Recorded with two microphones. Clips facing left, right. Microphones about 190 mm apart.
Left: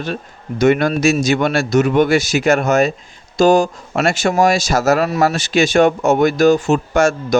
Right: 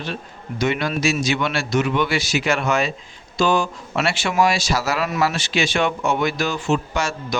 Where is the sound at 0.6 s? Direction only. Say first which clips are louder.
Left 8 dB; 50° left (ahead or behind).